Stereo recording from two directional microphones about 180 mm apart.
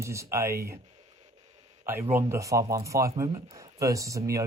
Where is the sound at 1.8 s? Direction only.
15° right (ahead or behind).